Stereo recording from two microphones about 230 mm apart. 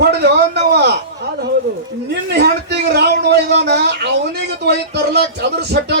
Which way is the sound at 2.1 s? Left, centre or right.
Right.